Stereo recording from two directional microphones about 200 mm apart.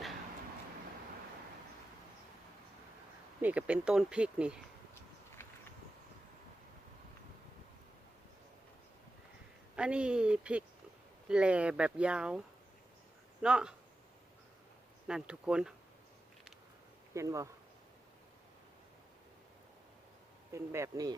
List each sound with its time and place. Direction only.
3.4 s speech: 5° right (ahead or behind)
5.4 s a sound: 10° left (ahead or behind)
9.7 s speech: 5° right (ahead or behind)
13.4 s speech: 5° right (ahead or behind)
15.0 s speech: 5° right (ahead or behind)
17.2 s speech: 15° right (ahead or behind)
20.5 s speech: 15° right (ahead or behind)